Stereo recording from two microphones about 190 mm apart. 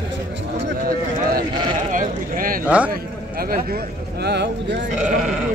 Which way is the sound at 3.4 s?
50° right (ahead or behind).